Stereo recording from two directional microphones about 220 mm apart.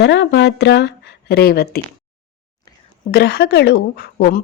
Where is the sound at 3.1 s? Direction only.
45° left (ahead or behind).